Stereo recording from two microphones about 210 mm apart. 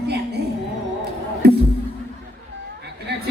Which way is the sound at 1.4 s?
50° right (ahead or behind).